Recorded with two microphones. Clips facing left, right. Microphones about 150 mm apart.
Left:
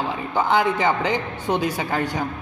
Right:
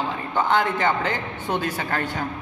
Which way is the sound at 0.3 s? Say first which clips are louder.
Left 2 dB; 10° left (ahead or behind).